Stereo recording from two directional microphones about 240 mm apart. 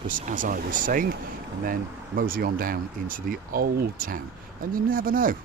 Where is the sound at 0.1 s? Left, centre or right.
Right.